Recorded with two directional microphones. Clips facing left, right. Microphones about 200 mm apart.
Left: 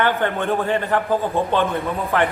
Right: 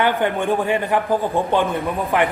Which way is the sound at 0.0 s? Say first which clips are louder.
Right 1 dB; 15° right (ahead or behind).